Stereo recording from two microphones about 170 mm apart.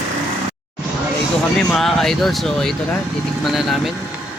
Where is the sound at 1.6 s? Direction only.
5° left (ahead or behind).